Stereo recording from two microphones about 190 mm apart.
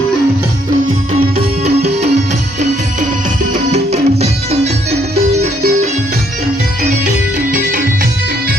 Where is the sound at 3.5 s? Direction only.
35° right (ahead or behind).